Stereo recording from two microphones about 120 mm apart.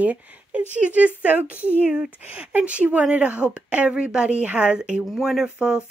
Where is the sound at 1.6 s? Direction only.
15° left (ahead or behind).